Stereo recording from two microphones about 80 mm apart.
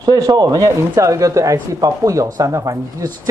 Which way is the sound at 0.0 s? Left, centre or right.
Right.